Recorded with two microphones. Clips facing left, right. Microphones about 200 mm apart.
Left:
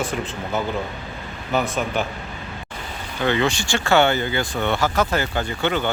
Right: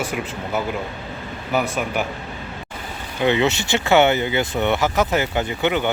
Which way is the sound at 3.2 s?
20° right (ahead or behind).